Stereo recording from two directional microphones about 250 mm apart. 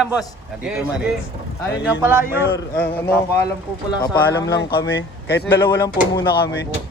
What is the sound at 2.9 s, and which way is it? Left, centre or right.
Speech, centre.